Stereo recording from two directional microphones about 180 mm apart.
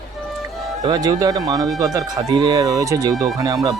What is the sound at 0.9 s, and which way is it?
Speech, 20° right (ahead or behind).